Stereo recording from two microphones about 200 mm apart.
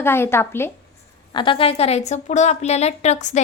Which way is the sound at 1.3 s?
25° left (ahead or behind).